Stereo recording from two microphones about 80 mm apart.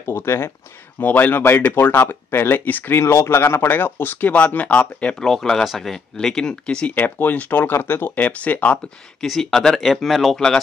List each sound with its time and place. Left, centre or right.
0.0 s speech: left
0.9 s speech: left
5.2 s speech: centre
9.2 s speech: centre